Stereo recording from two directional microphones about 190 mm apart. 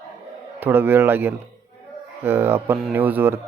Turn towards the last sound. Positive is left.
turn(degrees=-10)  # may be behind; listen again after turning